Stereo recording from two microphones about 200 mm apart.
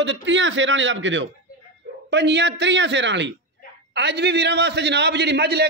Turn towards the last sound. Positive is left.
turn(degrees=-55)  # may be behind; listen again after turning